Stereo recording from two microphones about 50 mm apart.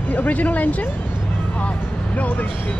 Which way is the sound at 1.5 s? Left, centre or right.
Left.